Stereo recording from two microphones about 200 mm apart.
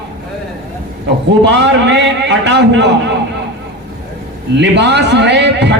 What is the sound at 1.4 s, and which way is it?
A man's voice, 60° right (ahead or behind).